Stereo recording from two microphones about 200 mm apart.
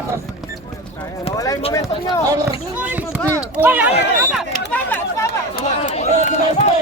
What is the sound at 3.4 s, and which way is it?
Speech, 10° right (ahead or behind).